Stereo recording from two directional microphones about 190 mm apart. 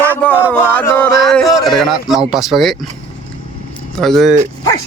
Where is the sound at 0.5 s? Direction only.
10° left (ahead or behind).